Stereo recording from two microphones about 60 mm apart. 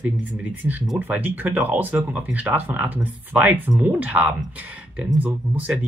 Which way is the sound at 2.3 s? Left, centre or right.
Right.